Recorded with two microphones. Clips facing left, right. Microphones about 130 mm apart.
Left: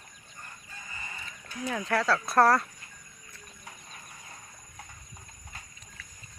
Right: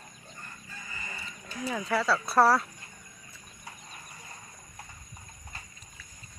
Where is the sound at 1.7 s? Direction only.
5° right (ahead or behind).